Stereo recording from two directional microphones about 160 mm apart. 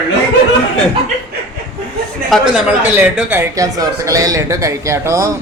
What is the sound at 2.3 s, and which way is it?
Speech, 5° right (ahead or behind).